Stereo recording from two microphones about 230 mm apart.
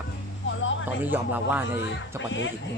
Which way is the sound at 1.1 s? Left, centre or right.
Centre.